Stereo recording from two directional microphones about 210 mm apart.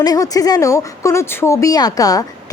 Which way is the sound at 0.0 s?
20° left (ahead or behind).